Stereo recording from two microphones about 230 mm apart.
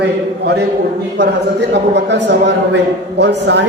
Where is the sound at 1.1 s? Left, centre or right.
Right.